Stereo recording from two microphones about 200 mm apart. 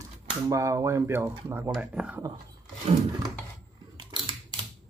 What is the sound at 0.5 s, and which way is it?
Speech, 15° right (ahead or behind).